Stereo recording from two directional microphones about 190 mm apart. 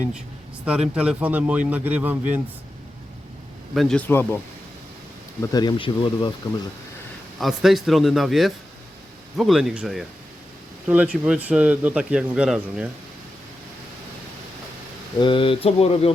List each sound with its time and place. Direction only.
0.6 s speech: 5° right (ahead or behind)
3.8 s speech: 5° left (ahead or behind)
5.4 s speech: 20° left (ahead or behind)
7.3 s speech: centre (ahead or behind)
15.2 s speech: 25° left (ahead or behind)